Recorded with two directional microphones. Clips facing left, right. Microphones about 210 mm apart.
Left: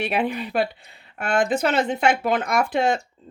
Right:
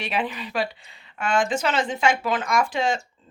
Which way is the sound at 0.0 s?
60° left (ahead or behind).